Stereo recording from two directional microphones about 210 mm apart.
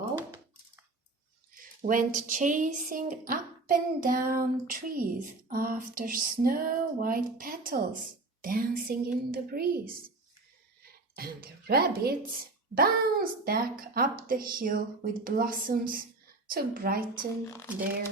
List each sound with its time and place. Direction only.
1.8 s speech: 40° right (ahead or behind)
11.1 s speech: 45° right (ahead or behind)